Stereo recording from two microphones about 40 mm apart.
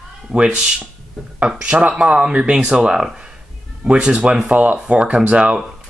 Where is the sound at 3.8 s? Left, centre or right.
Right.